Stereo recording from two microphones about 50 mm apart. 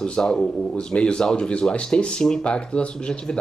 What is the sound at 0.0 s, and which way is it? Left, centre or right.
A man's voice, centre.